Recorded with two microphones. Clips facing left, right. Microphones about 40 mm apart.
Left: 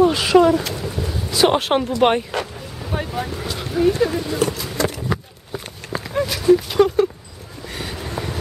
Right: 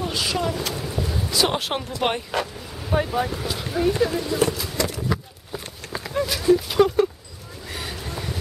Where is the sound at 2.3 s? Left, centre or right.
Centre.